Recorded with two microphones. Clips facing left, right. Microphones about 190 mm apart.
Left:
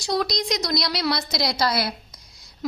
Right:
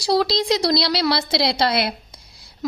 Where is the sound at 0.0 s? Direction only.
30° right (ahead or behind).